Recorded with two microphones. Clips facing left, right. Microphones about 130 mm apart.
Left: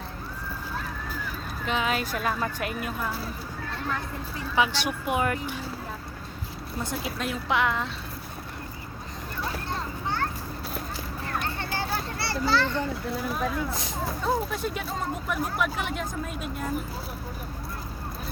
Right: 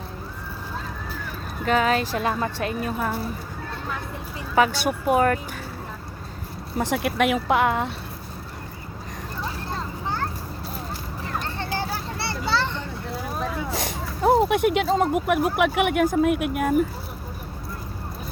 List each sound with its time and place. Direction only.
1.6 s speech: 45° right (ahead or behind)
4.5 s speech: 45° right (ahead or behind)
6.7 s speech: 70° right (ahead or behind)
7.4 s speech: 50° right (ahead or behind)
12.2 s children playing: 25° right (ahead or behind)
13.7 s speech: 70° right (ahead or behind)